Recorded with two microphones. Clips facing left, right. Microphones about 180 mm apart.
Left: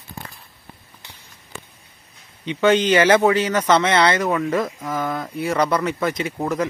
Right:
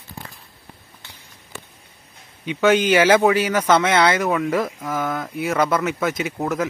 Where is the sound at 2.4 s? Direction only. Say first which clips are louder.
Even; 5° right (ahead or behind).